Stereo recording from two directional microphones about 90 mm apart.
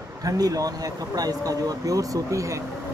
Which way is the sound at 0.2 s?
40° right (ahead or behind).